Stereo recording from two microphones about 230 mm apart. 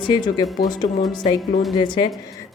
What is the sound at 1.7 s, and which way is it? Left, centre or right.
Speech, centre.